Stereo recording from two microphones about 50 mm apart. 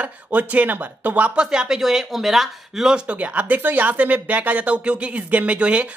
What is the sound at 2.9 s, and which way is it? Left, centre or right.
Speech, right.